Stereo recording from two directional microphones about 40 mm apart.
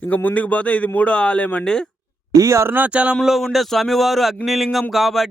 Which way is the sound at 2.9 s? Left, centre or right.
Right.